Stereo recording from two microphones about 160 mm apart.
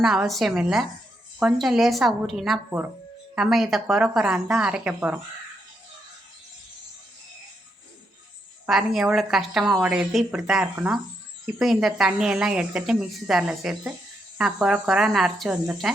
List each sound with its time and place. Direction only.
0.0 s a woman's voice: centre (ahead or behind)
8.6 s a woman's voice: centre (ahead or behind)